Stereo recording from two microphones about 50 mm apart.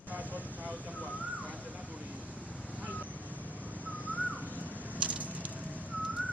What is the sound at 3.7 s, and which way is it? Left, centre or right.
Whistling, right.